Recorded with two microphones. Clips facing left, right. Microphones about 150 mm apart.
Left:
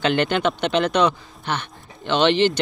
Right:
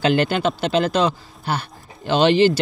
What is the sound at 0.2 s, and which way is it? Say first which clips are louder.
Speech: right 1 dB; 35° right (ahead or behind).